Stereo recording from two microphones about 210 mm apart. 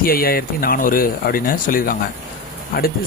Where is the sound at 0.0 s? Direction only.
45° left (ahead or behind).